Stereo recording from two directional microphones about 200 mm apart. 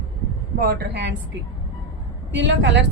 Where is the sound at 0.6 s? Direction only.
50° right (ahead or behind).